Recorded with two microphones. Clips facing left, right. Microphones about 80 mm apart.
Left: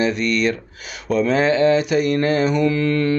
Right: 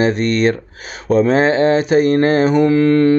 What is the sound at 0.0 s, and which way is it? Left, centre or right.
Mantra, right.